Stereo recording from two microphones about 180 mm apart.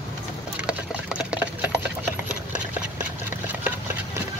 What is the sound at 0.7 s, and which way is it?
Sewing machine, 5° right (ahead or behind).